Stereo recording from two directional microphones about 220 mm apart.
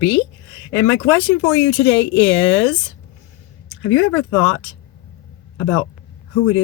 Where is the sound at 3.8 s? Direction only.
65° left (ahead or behind).